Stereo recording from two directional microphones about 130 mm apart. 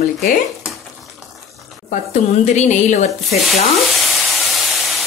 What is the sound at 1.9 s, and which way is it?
Speech, 65° left (ahead or behind).